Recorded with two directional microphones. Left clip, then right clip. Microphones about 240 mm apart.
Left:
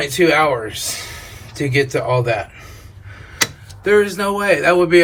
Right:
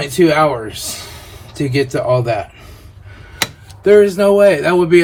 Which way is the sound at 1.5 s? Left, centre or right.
Centre.